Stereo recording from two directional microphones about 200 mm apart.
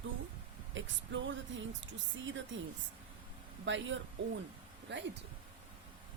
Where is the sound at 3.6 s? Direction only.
70° right (ahead or behind).